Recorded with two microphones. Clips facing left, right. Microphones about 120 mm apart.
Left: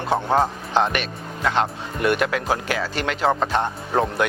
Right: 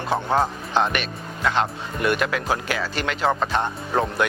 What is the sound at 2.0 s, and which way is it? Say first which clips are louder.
Speech: left 2 dB; 50° left (ahead or behind).